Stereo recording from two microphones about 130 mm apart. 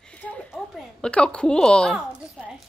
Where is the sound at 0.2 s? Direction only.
5° left (ahead or behind).